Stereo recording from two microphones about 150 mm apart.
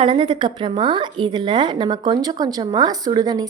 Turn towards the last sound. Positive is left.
turn(degrees=-25)  # may be behind; listen again after turning